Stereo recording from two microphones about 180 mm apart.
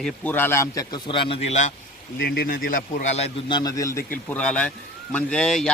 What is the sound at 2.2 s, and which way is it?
A man's voice, 55° left (ahead or behind).